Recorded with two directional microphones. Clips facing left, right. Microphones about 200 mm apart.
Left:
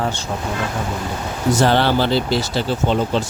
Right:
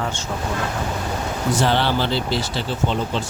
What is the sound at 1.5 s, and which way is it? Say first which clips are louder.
Speech: left 4 dB; 45° left (ahead or behind).